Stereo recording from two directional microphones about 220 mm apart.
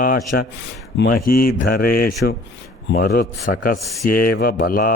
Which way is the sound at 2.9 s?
45° left (ahead or behind).